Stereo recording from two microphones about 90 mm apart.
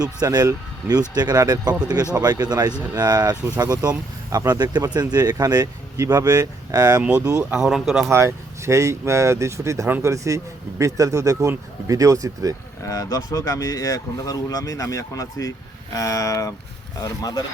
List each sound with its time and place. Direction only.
0.0 s speech: 50° right (ahead or behind)
7.0 s speech: 15° right (ahead or behind)
8.0 s speech: 35° right (ahead or behind)
12.8 s speech: 40° left (ahead or behind)